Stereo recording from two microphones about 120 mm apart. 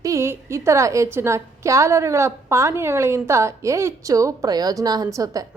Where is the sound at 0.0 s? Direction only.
25° right (ahead or behind).